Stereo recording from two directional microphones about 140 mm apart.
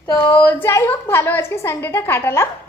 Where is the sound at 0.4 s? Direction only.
15° left (ahead or behind).